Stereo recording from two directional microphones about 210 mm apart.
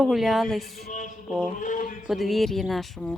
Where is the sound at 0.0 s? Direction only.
Centre (ahead or behind).